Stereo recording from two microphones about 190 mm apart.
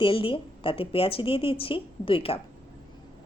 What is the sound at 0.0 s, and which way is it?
A woman's voice, 30° left (ahead or behind).